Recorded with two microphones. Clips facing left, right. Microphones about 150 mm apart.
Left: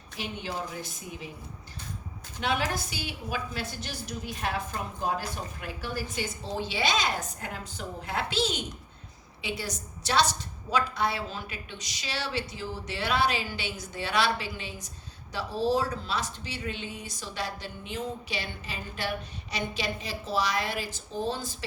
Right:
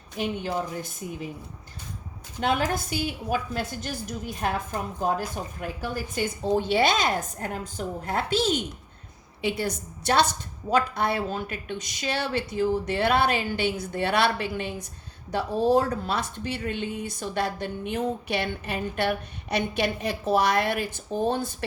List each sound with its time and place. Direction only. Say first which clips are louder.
0.2 s a woman's voice: right 7 dB; 50° right (ahead or behind)
2.4 s a woman's voice: right 4 dB; 50° right (ahead or behind)